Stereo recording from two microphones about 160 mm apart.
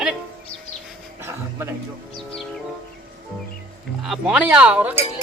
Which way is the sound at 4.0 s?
5° right (ahead or behind).